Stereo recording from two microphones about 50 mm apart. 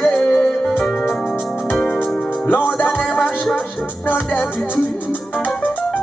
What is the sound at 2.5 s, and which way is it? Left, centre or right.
Music, left.